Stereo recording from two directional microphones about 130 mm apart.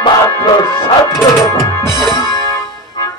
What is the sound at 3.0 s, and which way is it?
Music, 30° left (ahead or behind).